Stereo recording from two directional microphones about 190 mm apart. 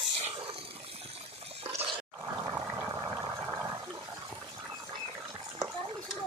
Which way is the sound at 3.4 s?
15° right (ahead or behind).